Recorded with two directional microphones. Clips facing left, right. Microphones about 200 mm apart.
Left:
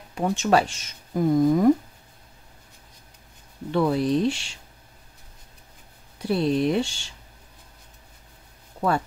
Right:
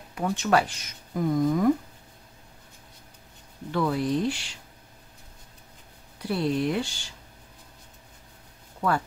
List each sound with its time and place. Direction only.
0.1 s speech: 25° left (ahead or behind)
3.7 s speech: 25° left (ahead or behind)
6.1 s speech: 25° left (ahead or behind)